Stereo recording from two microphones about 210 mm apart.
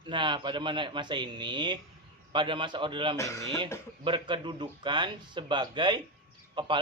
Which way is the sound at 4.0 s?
25° right (ahead or behind).